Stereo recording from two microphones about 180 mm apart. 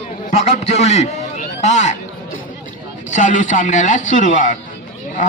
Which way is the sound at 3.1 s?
45° left (ahead or behind).